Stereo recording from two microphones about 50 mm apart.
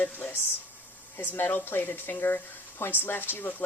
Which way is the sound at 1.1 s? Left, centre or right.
Left.